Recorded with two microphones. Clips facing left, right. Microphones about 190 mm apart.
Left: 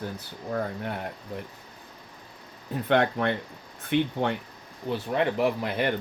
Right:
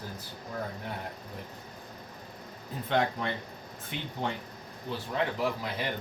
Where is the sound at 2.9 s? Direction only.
65° left (ahead or behind).